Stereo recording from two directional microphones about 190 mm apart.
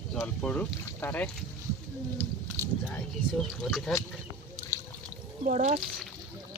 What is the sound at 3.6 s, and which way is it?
Speech, centre (ahead or behind).